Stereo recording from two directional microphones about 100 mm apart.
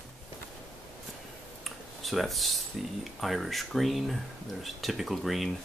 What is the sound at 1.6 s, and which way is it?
Speech, centre (ahead or behind).